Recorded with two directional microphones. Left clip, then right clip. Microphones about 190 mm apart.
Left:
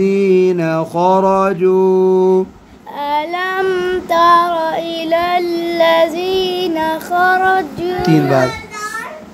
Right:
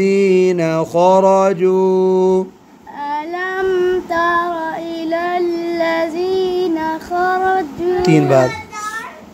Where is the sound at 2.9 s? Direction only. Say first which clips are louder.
Left 4 dB; 40° left (ahead or behind).